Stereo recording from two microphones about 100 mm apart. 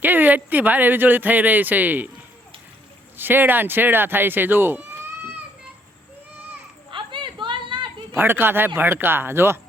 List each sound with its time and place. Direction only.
0.0 s speech: 20° right (ahead or behind)
3.2 s speech: 20° right (ahead or behind)
6.9 s a sound: 55° right (ahead or behind)
8.1 s speech: 20° right (ahead or behind)